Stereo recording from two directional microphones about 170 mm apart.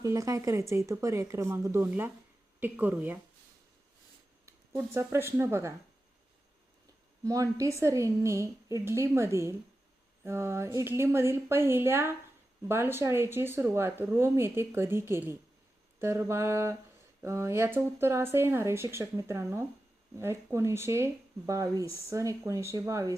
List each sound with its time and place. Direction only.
0.0 s speech: 20° right (ahead or behind)
4.4 s speech: 15° right (ahead or behind)
7.3 s speech: 20° right (ahead or behind)